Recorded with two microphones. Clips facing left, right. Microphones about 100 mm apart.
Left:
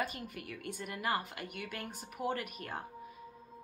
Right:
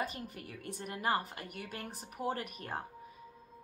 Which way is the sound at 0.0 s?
35° right (ahead or behind).